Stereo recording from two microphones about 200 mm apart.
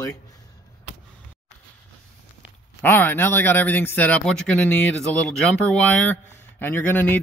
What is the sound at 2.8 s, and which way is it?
A man's voice, 10° left (ahead or behind).